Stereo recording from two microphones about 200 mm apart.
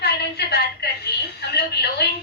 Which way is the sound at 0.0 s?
55° left (ahead or behind).